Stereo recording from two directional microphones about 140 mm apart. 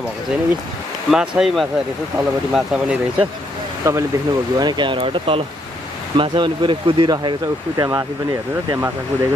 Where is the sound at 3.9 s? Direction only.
20° right (ahead or behind).